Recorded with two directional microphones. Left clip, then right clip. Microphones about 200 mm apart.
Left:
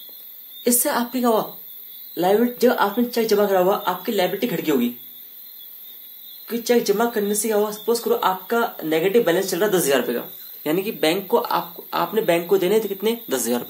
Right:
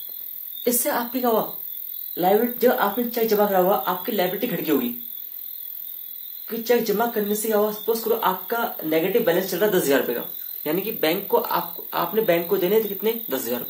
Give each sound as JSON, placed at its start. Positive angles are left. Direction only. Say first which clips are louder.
{"t": 0.7, "sound": "speech", "louder": "left 2 dB", "side_deg": 45}
{"t": 6.4, "sound": "speech", "louder": "left 2 dB", "side_deg": 40}